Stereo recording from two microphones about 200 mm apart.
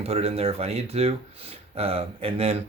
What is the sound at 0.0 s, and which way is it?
Speech, 30° right (ahead or behind).